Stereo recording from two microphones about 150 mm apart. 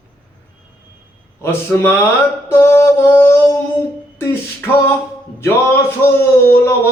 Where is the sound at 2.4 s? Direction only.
15° left (ahead or behind).